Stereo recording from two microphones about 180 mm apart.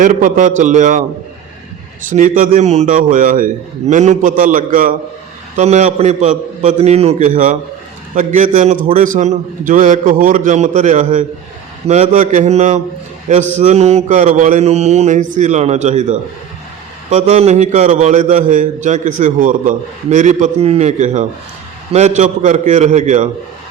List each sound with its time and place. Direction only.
0.0 s a man's voice: 45° right (ahead or behind)
2.0 s a man's voice: 50° right (ahead or behind)
5.5 s mantra: 40° right (ahead or behind)
8.1 s a man's voice: 45° right (ahead or behind)
11.9 s mantra: 40° right (ahead or behind)
17.1 s a man's voice: 35° right (ahead or behind)
21.9 s mantra: 40° right (ahead or behind)